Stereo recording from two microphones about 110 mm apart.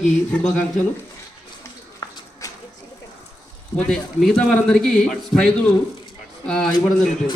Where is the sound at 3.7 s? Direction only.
5° left (ahead or behind).